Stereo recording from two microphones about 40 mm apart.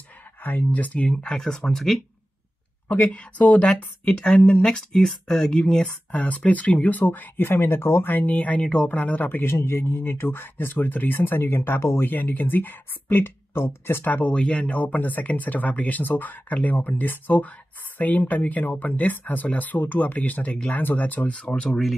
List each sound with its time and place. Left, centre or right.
0.4 s speech: left
1.3 s speech: left
1.6 s speech: centre
3.0 s speech: left; by 5.8 s centre
5.8 s speech: left
8.1 s speech: left
9.4 s speech: left
12.3 s speech: left
14.0 s speech: left
14.3 s speech: left